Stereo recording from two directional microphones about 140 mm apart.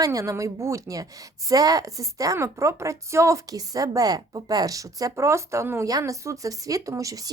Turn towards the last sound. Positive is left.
turn(degrees=-25)  # may be behind; listen again after turning